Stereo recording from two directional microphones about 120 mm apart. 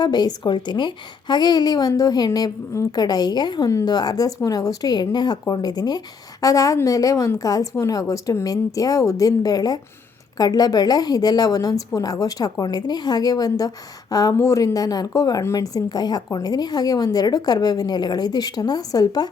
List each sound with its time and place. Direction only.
0.0 s a woman's voice: 35° left (ahead or behind)